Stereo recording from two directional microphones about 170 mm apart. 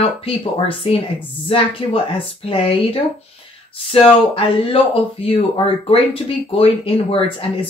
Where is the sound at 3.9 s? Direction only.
35° left (ahead or behind).